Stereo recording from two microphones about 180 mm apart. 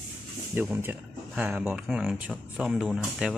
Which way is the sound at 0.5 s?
10° right (ahead or behind).